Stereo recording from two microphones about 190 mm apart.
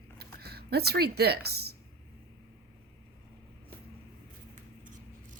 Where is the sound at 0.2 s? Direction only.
55° right (ahead or behind).